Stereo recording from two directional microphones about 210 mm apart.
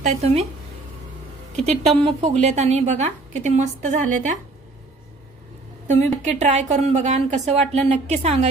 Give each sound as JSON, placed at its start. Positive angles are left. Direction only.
{"t": 0.0, "sound": "a woman's voice", "side_deg": -30}
{"t": 1.6, "sound": "speech", "side_deg": 5}
{"t": 2.4, "sound": "a woman's voice", "side_deg": -30}
{"t": 5.9, "sound": "a woman's voice", "side_deg": -35}